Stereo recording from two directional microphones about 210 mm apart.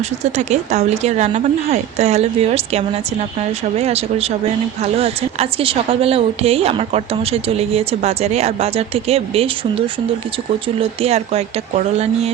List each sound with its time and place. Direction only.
0.0 s speech: 35° right (ahead or behind)